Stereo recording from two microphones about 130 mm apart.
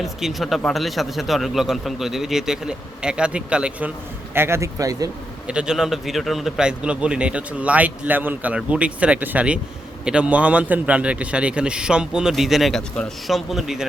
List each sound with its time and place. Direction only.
0.0 s a man's voice: centre (ahead or behind)
4.4 s speech: 20° right (ahead or behind)
5.5 s a man's voice: 5° right (ahead or behind)